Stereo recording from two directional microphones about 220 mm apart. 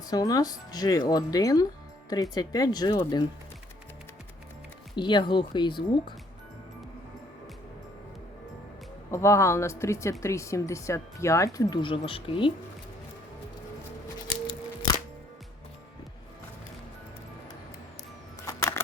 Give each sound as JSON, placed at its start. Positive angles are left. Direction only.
{"t": 0.0, "sound": "speech", "side_deg": 15}
{"t": 4.9, "sound": "speech", "side_deg": 20}
{"t": 9.1, "sound": "speech", "side_deg": 15}
{"t": 18.4, "sound": "camera", "side_deg": 15}